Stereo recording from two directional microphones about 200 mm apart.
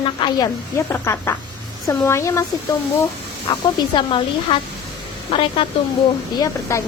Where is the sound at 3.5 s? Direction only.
25° left (ahead or behind).